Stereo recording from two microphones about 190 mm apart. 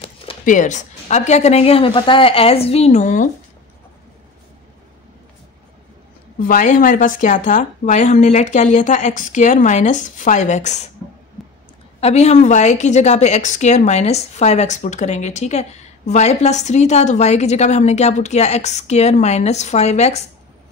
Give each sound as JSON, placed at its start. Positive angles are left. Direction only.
{"t": 0.5, "sound": "a woman's voice", "side_deg": 40}
{"t": 6.4, "sound": "a woman's voice", "side_deg": 45}
{"t": 11.4, "sound": "a sound", "side_deg": 0}
{"t": 12.0, "sound": "a woman's voice", "side_deg": 35}